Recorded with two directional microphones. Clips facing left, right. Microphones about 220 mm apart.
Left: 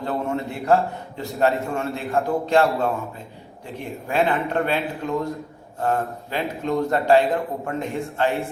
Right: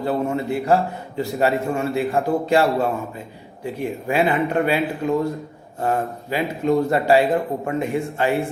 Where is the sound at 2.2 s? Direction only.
15° right (ahead or behind).